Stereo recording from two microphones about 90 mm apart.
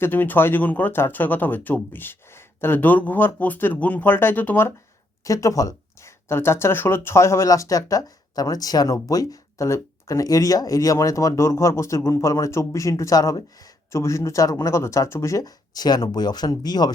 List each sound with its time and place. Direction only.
0.0 s speech: 20° left (ahead or behind)
5.2 s speech: 40° left (ahead or behind)